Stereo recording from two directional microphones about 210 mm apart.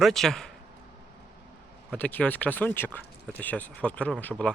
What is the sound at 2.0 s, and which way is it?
Speech, 10° left (ahead or behind).